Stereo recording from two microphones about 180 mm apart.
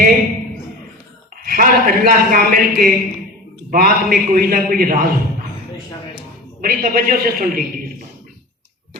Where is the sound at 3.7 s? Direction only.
55° right (ahead or behind).